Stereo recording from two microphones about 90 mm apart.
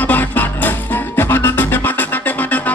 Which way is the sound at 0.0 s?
20° left (ahead or behind).